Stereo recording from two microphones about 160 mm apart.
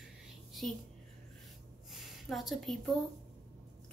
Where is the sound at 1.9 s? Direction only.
Centre (ahead or behind).